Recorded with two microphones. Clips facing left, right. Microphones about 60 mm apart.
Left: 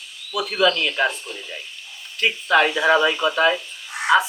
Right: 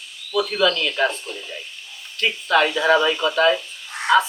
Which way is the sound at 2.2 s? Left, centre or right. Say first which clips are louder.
Left 1 dB; centre.